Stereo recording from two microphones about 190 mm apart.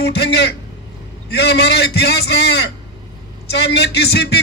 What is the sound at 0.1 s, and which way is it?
A man's voice, 60° left (ahead or behind).